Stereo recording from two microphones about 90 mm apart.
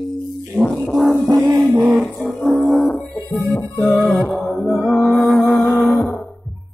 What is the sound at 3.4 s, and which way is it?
Music, 25° left (ahead or behind).